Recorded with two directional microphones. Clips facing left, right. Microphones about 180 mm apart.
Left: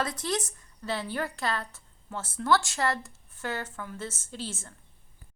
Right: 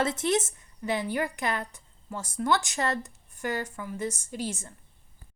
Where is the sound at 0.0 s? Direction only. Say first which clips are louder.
Right 5 dB; 25° right (ahead or behind).